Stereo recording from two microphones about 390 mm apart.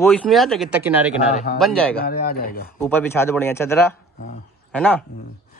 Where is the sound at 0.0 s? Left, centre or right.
Centre.